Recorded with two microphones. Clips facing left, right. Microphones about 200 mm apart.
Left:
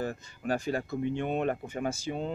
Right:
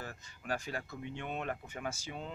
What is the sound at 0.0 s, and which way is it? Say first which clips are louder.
Speech: left 12 dB; 35° left (ahead or behind).